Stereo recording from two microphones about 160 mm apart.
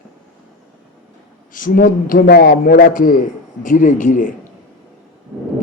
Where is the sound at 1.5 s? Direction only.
60° left (ahead or behind).